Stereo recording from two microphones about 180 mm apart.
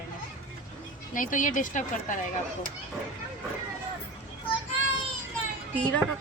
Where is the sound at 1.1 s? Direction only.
45° left (ahead or behind).